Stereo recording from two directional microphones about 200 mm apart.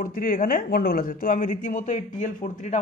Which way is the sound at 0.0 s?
45° left (ahead or behind).